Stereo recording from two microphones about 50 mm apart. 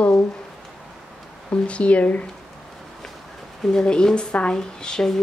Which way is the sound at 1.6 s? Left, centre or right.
Left.